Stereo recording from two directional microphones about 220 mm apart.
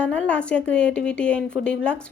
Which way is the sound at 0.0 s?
5° left (ahead or behind).